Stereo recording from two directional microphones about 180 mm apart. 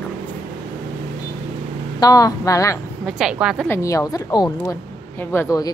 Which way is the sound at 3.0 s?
5° right (ahead or behind).